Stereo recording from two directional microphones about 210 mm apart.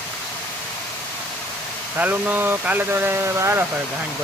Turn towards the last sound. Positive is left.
turn(degrees=-10)  # may be behind; listen again after turning